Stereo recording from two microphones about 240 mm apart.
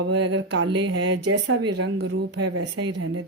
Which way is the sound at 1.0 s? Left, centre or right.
Right.